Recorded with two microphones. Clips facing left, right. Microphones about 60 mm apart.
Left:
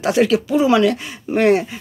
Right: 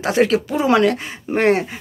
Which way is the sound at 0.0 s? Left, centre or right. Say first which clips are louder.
Left 1 dB; right.